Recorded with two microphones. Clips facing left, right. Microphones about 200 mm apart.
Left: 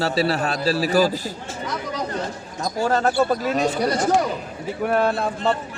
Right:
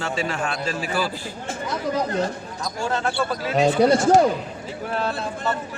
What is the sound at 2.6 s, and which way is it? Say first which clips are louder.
Speech: left 5 dB; 40° left (ahead or behind).